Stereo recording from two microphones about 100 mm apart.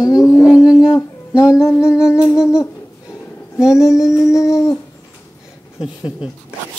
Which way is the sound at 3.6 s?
5° right (ahead or behind).